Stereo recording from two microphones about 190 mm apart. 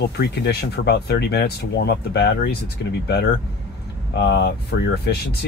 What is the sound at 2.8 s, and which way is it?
Speech, 70° left (ahead or behind).